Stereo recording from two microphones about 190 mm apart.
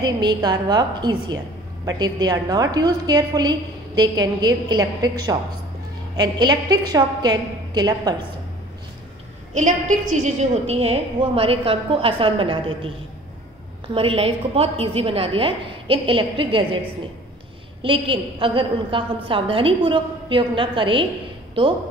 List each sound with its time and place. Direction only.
0.0 s a woman's voice: 20° right (ahead or behind)
9.5 s a woman's voice: 40° right (ahead or behind)
13.9 s a woman's voice: 30° right (ahead or behind)
17.8 s a woman's voice: 25° right (ahead or behind)